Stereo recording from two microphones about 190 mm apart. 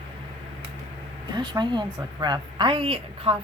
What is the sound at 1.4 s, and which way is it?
A woman's voice, 25° right (ahead or behind).